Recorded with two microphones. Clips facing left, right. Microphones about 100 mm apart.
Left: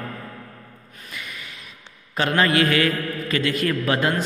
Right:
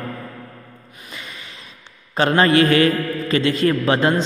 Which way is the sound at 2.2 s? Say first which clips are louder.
Right 5 dB; 35° right (ahead or behind).